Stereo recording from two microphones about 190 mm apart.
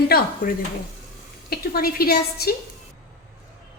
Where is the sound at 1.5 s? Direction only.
55° left (ahead or behind).